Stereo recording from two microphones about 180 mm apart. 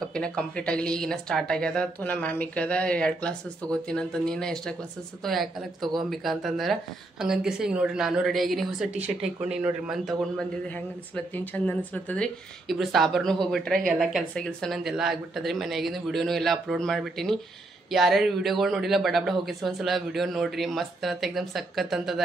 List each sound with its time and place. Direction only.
0.1 s a woman's voice: 5° left (ahead or behind)